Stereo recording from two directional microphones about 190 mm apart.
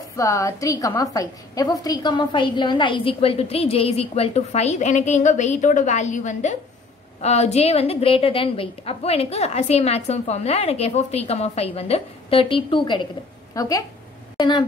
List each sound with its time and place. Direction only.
0.2 s a woman's voice: 15° left (ahead or behind)